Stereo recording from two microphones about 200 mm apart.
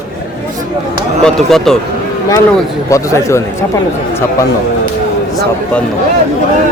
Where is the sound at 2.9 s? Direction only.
15° left (ahead or behind).